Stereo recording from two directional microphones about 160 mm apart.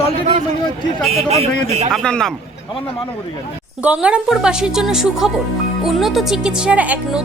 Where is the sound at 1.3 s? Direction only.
45° right (ahead or behind).